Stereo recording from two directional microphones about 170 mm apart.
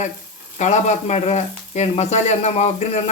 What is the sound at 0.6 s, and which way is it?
Speech, 45° left (ahead or behind).